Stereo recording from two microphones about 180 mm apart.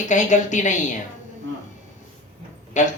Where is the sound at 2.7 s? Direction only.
40° left (ahead or behind).